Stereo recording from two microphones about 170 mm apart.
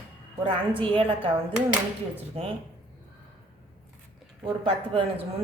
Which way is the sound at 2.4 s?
35° right (ahead or behind).